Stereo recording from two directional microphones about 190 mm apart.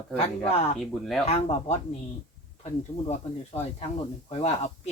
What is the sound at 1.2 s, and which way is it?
Speech, 35° left (ahead or behind).